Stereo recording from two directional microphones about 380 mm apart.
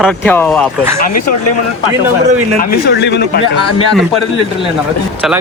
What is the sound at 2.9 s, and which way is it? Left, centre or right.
Speech, left.